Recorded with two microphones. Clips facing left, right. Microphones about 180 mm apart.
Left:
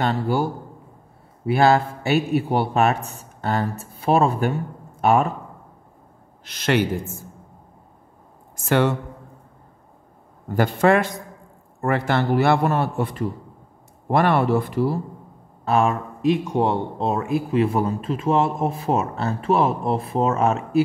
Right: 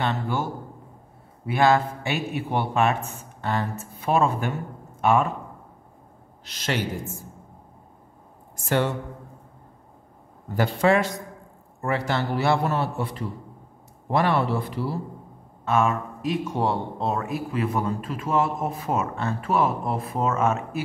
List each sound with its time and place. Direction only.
0.0 s a man's voice: 35° left (ahead or behind)
6.4 s speech: 55° left (ahead or behind)
8.6 s speech: 70° left (ahead or behind)
10.5 s a man's voice: 50° left (ahead or behind)
15.6 s speech: 35° left (ahead or behind)
16.4 s speech: 20° left (ahead or behind)